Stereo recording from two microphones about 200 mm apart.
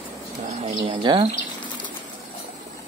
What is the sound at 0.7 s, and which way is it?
Speech, 25° right (ahead or behind).